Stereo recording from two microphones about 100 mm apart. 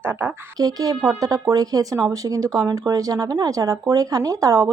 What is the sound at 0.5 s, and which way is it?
Speech, 40° right (ahead or behind).